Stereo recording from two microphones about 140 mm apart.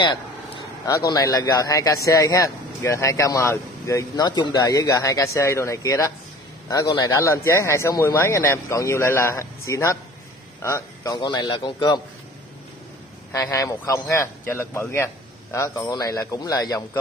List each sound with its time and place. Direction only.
0.0 s a man's voice: 30° left (ahead or behind)
11.1 s a man's voice: 35° left (ahead or behind)
13.3 s speech: 25° left (ahead or behind)